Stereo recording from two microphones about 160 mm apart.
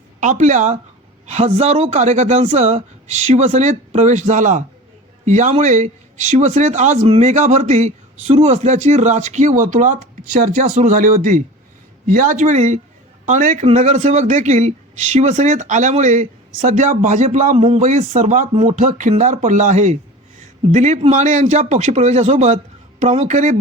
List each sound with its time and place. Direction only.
0.2 s a man's voice: 50° right (ahead or behind)
18.8 s a man's voice: 50° right (ahead or behind)